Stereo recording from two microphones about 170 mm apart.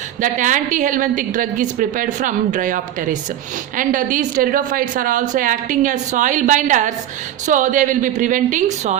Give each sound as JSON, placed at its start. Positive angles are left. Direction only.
{"t": 0.2, "sound": "a woman's voice", "side_deg": -50}